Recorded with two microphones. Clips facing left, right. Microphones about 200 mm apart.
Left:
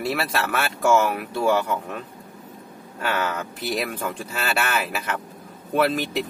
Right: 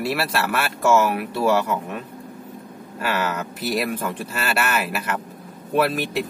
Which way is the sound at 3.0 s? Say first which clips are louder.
Right 1 dB; 5° right (ahead or behind).